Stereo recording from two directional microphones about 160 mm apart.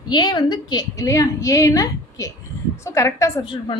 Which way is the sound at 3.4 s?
30° left (ahead or behind).